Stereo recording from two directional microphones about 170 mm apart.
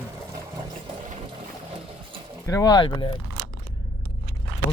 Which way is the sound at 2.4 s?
20° left (ahead or behind).